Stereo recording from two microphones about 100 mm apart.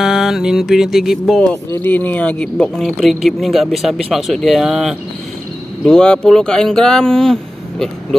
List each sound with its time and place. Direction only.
0.0 s music: 5° right (ahead or behind)
1.8 s speech: 20° left (ahead or behind)
2.5 s speech: centre (ahead or behind)
5.9 s speech: 5° left (ahead or behind)